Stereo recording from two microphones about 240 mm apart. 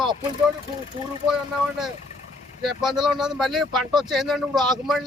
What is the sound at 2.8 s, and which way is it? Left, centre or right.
Speech, centre.